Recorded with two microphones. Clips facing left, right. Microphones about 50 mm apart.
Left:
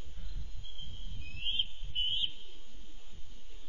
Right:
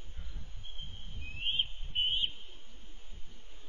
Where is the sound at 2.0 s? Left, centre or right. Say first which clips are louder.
Right 3 dB; right.